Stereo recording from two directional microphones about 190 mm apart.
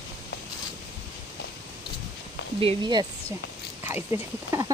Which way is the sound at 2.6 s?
25° right (ahead or behind).